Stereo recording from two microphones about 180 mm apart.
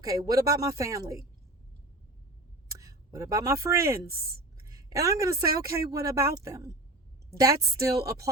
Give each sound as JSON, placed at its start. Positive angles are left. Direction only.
{"t": 0.0, "sound": "speech", "side_deg": -20}
{"t": 2.7, "sound": "a woman's voice", "side_deg": -20}